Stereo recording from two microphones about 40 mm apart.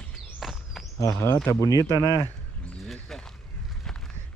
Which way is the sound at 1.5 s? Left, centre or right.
Left.